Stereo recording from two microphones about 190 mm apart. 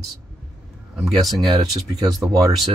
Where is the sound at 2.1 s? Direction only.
20° right (ahead or behind).